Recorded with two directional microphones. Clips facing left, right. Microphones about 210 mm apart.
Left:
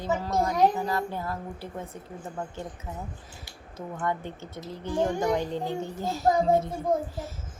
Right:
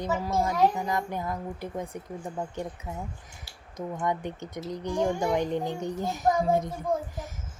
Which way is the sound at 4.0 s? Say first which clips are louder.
Even; 15° right (ahead or behind).